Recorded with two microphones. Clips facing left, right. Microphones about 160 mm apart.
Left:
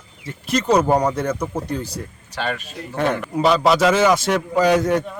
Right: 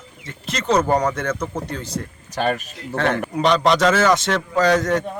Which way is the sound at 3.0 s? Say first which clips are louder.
Left 1 dB; 15° left (ahead or behind).